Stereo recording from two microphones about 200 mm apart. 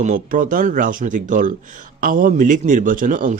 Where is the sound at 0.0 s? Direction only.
40° right (ahead or behind).